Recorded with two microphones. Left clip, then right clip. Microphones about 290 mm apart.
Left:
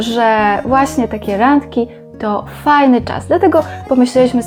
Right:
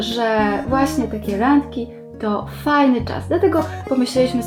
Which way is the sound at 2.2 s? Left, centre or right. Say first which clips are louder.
Left 5 dB; left.